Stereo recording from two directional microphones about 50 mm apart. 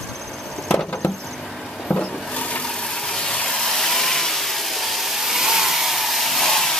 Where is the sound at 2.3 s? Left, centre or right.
Left.